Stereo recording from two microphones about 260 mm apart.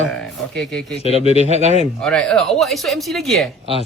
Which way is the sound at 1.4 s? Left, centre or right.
Right.